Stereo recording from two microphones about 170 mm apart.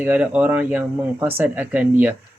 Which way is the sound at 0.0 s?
10° right (ahead or behind).